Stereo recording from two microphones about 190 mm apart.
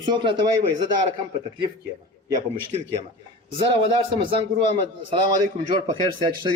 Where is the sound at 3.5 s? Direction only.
25° right (ahead or behind).